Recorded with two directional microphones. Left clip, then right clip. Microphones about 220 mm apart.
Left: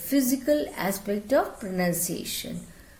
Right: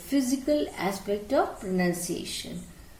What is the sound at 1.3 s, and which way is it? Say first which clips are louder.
A woman's voice: left 2 dB; 50° left (ahead or behind).